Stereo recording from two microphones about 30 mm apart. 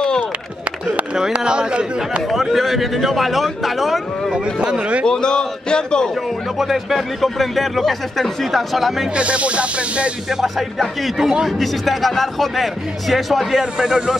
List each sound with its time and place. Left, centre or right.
1.3 s snake: right
2.5 s speech: centre
4.3 s speech: right
5.0 s a man's voice: left
6.6 s speech: centre
9.1 s snake: right
11.0 s speech: centre
13.7 s speech: right